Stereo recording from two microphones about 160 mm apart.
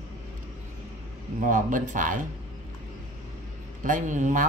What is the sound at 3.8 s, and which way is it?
Speech, 50° right (ahead or behind).